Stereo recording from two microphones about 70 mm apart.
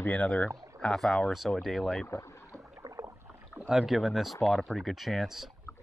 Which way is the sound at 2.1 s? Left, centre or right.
Left.